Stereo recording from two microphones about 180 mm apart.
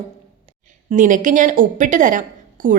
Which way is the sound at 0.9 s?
45° right (ahead or behind).